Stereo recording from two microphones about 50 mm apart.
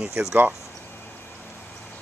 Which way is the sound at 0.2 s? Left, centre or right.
Right.